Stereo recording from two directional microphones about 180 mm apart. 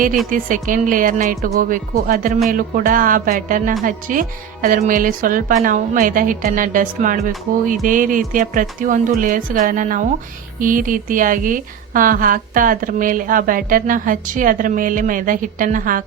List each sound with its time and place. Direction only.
0.3 s a woman's voice: 50° right (ahead or behind)